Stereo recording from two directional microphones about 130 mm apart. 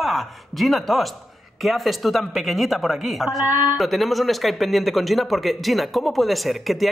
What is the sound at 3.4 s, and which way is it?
Speech, 15° right (ahead or behind).